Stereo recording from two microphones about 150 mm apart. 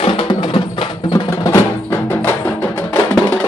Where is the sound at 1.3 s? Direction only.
20° left (ahead or behind).